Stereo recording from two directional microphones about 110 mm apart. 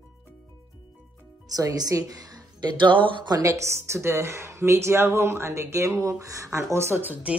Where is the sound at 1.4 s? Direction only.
35° right (ahead or behind).